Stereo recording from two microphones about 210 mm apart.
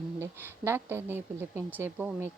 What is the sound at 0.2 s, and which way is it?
A woman's voice, 10° right (ahead or behind).